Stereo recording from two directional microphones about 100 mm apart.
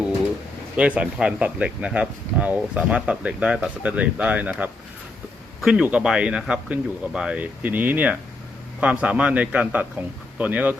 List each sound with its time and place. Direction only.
0.8 s speech: 10° right (ahead or behind)
5.5 s speech: 5° right (ahead or behind)